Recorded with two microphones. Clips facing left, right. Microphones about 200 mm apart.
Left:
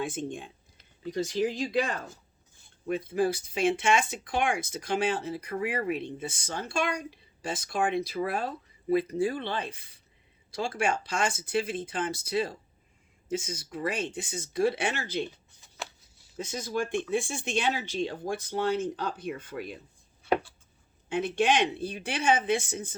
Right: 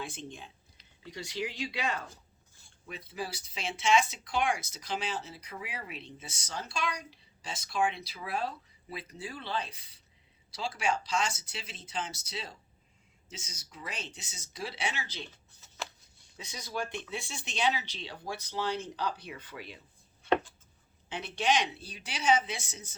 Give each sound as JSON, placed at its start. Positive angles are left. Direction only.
{"t": 0.0, "sound": "speech", "side_deg": 50}
{"t": 16.4, "sound": "speech", "side_deg": 50}
{"t": 21.1, "sound": "speech", "side_deg": 50}